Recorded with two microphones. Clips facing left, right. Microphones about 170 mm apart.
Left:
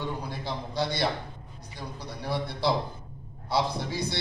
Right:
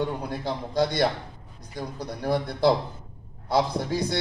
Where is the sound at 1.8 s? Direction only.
50° right (ahead or behind).